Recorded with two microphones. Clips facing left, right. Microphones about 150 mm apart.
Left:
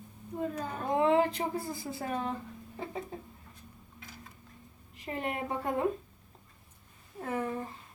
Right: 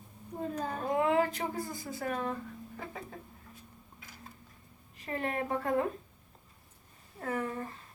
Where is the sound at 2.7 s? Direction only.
25° left (ahead or behind).